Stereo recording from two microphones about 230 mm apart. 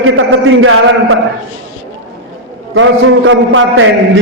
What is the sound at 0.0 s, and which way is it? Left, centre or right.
A man's voice, right.